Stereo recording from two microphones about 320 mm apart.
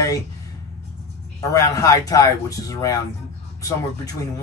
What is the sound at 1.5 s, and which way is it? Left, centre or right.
Speech, centre.